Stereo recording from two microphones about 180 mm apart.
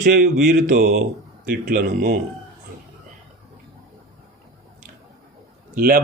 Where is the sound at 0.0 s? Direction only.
60° right (ahead or behind).